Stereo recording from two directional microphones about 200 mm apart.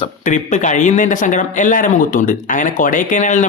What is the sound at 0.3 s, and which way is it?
Speech, 35° left (ahead or behind).